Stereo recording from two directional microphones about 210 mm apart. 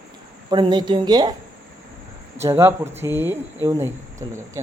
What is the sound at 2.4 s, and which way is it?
Speech, 15° right (ahead or behind).